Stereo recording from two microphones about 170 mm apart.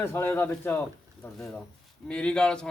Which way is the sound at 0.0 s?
15° left (ahead or behind).